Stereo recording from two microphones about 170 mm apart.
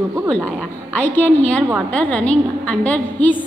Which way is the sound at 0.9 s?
10° left (ahead or behind).